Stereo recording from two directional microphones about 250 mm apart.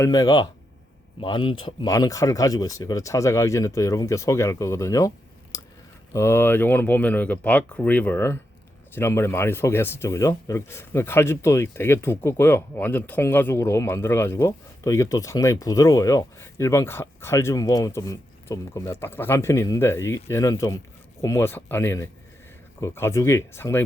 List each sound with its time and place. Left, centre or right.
0.0 s speech: centre